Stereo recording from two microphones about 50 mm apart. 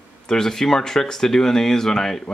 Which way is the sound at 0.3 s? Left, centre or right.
Centre.